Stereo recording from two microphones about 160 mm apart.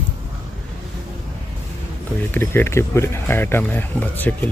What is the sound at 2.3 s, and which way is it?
Speech, 15° left (ahead or behind).